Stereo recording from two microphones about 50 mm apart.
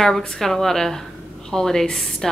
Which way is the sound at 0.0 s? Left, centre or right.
Centre.